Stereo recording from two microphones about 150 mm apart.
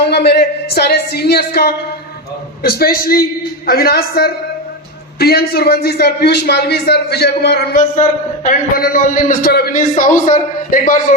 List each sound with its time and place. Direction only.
0.0 s a man's voice: 90° left
3.7 s a man's voice: 90° left
7.9 s a man's voice: 55° left (ahead or behind); by 9.8 s 90° left
9.9 s a man's voice: 60° left (ahead or behind)